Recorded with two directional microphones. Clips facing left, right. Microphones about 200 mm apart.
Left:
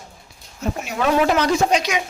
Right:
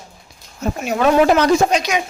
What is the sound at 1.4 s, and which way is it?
Speech, 45° right (ahead or behind).